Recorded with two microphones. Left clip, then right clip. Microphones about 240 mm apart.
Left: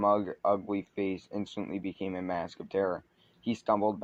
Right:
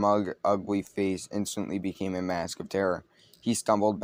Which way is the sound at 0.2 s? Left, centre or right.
Right.